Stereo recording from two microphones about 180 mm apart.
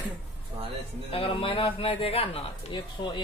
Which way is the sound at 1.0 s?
30° left (ahead or behind).